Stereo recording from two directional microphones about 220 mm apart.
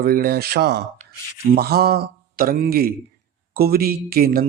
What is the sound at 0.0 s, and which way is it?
Speech, 40° right (ahead or behind).